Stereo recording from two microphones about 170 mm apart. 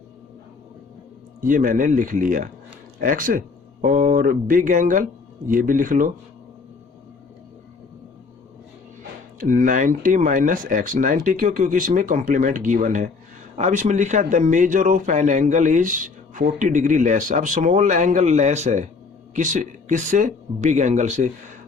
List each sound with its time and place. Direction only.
1.4 s a man's voice: 50° right (ahead or behind)
9.4 s a man's voice: 50° right (ahead or behind)